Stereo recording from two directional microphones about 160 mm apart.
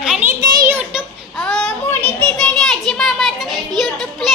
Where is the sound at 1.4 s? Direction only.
5° left (ahead or behind).